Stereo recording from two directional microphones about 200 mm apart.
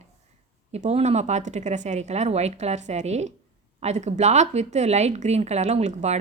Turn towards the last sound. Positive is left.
turn(degrees=-35)  # may be behind; listen again after turning